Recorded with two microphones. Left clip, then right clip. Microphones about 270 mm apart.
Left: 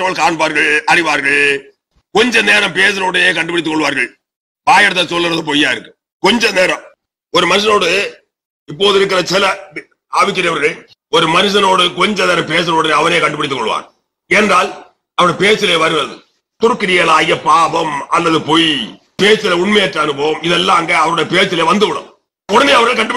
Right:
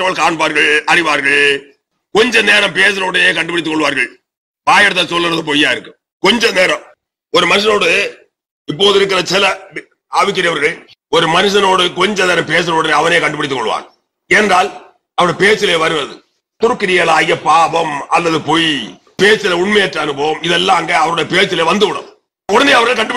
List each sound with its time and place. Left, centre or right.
0.0 s a man's voice: centre; by 13.8 s right
15.1 s a man's voice: right